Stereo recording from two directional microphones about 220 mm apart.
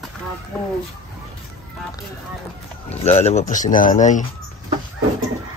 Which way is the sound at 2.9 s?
30° left (ahead or behind).